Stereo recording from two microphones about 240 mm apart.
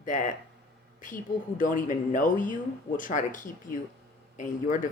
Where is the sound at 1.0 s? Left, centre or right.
Left.